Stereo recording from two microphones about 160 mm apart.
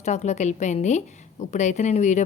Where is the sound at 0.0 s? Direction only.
45° left (ahead or behind).